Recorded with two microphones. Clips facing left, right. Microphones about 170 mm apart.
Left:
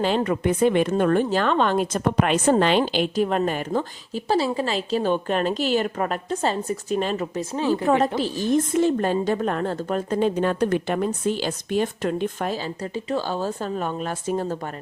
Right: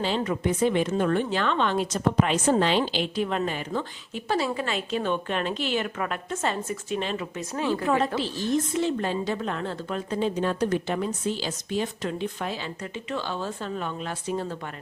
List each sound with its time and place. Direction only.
0.0 s speech: 55° left (ahead or behind)
1.2 s a woman's voice: 40° left (ahead or behind)
7.5 s a woman's voice: 30° left (ahead or behind)
8.2 s a woman's voice: 50° left (ahead or behind)